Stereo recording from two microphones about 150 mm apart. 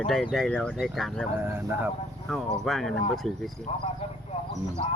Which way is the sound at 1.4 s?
15° right (ahead or behind).